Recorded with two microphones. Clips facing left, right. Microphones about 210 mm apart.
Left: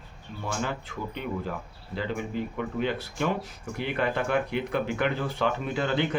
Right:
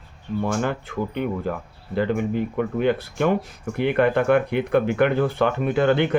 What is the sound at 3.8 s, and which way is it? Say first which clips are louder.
Speech: right 9 dB; 60° right (ahead or behind).